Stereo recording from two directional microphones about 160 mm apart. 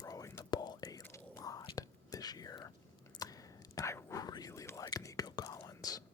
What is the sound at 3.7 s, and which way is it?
Whispering, 20° left (ahead or behind).